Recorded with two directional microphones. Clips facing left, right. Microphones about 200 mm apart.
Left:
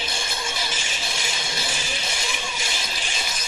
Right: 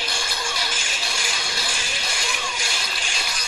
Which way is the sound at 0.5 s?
Centre (ahead or behind).